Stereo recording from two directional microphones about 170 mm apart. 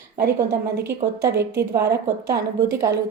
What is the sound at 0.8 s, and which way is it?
A woman's voice, 15° right (ahead or behind).